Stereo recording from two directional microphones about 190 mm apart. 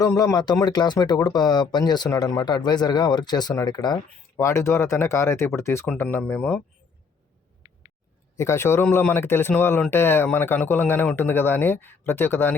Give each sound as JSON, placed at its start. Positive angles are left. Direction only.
{"t": 0.0, "sound": "speech", "side_deg": 15}
{"t": 8.4, "sound": "speech", "side_deg": 15}